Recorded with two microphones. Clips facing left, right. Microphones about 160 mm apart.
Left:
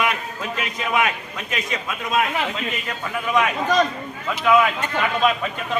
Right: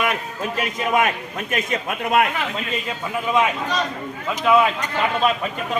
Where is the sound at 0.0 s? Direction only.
40° right (ahead or behind).